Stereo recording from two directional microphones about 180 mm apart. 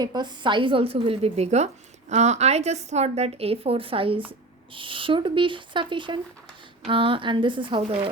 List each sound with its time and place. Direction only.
0.0 s a woman's voice: 25° right (ahead or behind)